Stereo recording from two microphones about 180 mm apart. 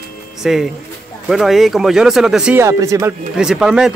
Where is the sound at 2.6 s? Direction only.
15° right (ahead or behind).